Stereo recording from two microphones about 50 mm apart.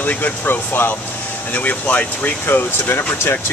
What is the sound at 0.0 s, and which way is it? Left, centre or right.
Speech, left.